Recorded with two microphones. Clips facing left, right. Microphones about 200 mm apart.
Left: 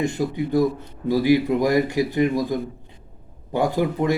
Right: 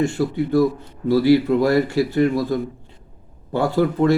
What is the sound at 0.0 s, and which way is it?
Speech, 15° left (ahead or behind).